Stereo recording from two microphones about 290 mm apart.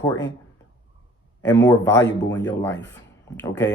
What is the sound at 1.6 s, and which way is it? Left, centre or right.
Speech, centre.